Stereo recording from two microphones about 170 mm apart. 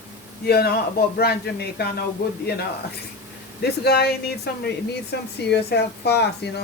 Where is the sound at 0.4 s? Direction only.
70° left (ahead or behind).